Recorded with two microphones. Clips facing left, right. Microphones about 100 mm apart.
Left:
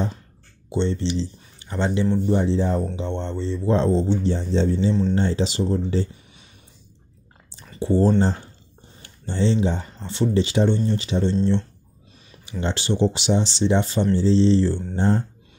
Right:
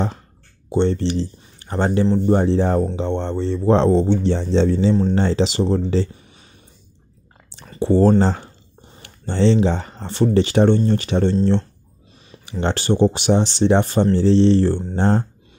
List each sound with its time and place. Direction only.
0.7 s speech: 55° right (ahead or behind); by 6.0 s 80° right
7.8 s speech: 70° right (ahead or behind)
8.2 s speech: 90° right
9.0 s speech: 70° right (ahead or behind)
12.4 s speech: 60° right (ahead or behind)
14.1 s speech: 65° right (ahead or behind)
15.0 s speech: 75° right (ahead or behind)